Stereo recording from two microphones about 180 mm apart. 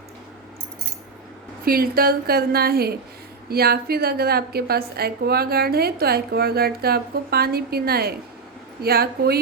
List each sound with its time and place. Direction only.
1.6 s a woman's voice: 55° right (ahead or behind)